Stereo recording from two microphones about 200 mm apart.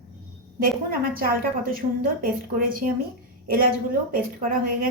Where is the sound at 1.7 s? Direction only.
45° right (ahead or behind).